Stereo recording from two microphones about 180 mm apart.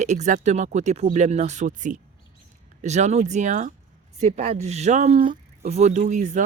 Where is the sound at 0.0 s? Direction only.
40° right (ahead or behind).